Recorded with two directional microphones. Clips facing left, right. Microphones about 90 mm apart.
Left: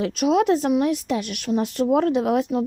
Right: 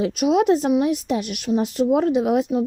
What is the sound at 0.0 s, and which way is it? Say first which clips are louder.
Speech: right 1 dB; 15° right (ahead or behind).